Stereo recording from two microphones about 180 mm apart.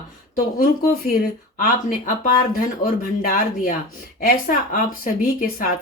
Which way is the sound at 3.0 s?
50° left (ahead or behind).